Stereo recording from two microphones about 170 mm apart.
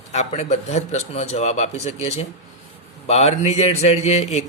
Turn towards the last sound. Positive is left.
turn(degrees=40)  # may be behind; listen again after turning